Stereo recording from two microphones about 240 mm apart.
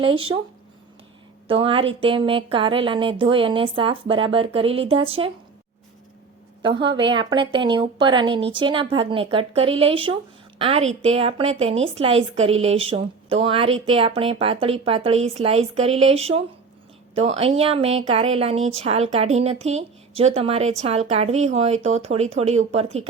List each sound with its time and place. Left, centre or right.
0.0 s speech: right
1.5 s speech: right
6.6 s speech: right